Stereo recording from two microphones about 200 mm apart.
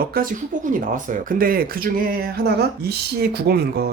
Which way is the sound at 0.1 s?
45° right (ahead or behind).